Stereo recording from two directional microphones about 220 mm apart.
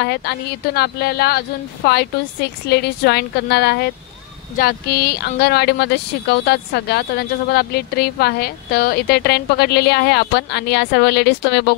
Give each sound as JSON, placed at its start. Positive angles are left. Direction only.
{"t": 0.0, "sound": "speech", "side_deg": 50}